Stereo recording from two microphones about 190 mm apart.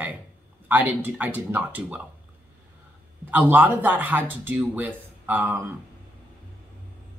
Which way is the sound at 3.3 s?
10° right (ahead or behind).